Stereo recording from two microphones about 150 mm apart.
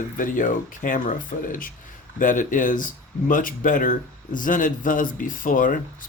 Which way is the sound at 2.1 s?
60° left (ahead or behind).